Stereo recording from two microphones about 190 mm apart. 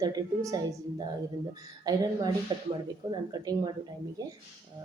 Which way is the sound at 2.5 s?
25° right (ahead or behind).